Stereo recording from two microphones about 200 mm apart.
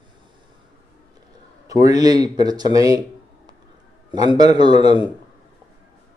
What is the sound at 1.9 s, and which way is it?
A man's voice, 20° right (ahead or behind).